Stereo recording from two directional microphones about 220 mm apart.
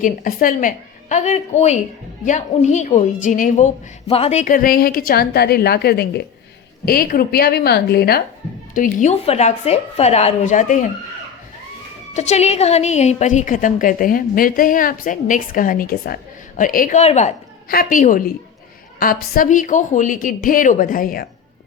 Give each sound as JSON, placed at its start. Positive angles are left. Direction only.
{"t": 0.0, "sound": "a woman's voice", "side_deg": 40}
{"t": 12.1, "sound": "a woman's voice", "side_deg": 30}